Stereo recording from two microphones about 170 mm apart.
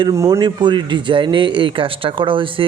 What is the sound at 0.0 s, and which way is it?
A man's voice, 20° right (ahead or behind).